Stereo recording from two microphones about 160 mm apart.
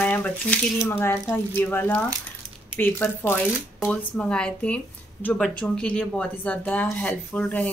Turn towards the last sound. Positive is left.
turn(degrees=10)  # may be behind; listen again after turning